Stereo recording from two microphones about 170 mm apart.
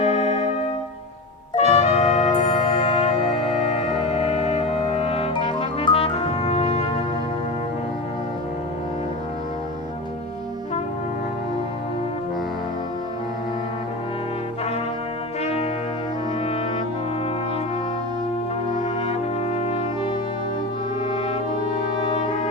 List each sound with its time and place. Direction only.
0.1 s music: 35° left (ahead or behind)
1.5 s music: 40° left (ahead or behind)
3.5 s brass instrument: 35° left (ahead or behind)
15.4 s brass instrument: 35° left (ahead or behind)
19.0 s brass instrument: 35° left (ahead or behind)